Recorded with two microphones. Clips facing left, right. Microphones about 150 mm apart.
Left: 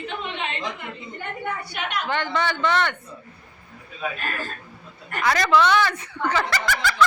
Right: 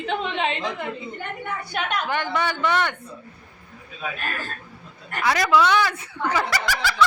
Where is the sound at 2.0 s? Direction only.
10° right (ahead or behind).